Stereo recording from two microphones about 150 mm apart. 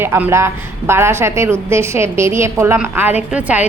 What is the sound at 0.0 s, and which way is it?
A woman's voice, 15° right (ahead or behind).